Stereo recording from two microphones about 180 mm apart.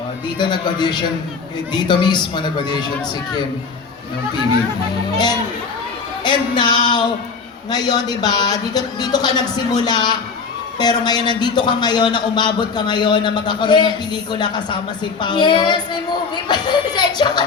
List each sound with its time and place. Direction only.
0.3 s a man's voice: 25° left (ahead or behind)
5.1 s a man's voice: 25° left (ahead or behind)